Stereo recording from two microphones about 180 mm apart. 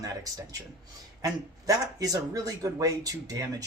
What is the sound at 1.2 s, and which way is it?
Speech, 20° right (ahead or behind).